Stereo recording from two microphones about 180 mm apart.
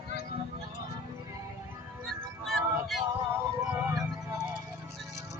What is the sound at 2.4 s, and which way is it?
Music, centre (ahead or behind).